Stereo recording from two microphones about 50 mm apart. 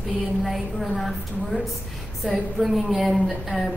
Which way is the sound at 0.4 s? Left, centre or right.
Centre.